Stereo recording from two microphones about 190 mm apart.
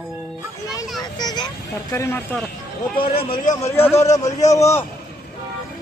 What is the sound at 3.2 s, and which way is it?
Speech, 50° left (ahead or behind).